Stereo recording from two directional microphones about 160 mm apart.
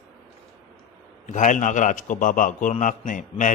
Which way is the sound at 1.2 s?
50° left (ahead or behind).